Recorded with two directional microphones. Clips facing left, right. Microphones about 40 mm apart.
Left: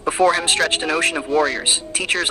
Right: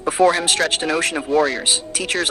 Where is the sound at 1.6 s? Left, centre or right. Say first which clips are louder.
Even; left.